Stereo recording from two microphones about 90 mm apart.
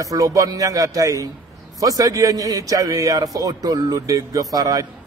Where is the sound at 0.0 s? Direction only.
40° right (ahead or behind).